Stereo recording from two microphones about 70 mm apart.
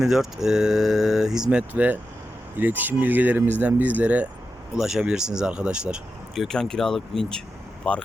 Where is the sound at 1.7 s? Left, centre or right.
Right.